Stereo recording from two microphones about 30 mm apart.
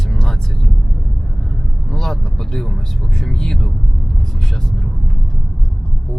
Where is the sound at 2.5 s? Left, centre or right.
Centre.